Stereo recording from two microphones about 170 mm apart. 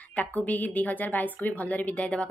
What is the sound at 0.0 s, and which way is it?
A woman's voice, 10° left (ahead or behind).